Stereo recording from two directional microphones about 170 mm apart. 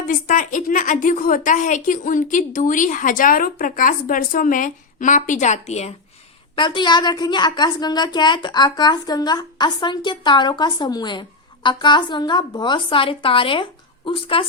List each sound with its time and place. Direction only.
0.0 s a woman's voice: 50° left (ahead or behind)
6.6 s a woman's voice: 25° left (ahead or behind)